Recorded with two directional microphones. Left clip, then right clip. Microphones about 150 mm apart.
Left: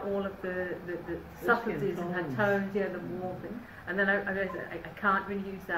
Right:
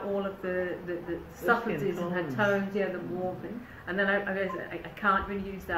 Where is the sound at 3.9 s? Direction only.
25° right (ahead or behind).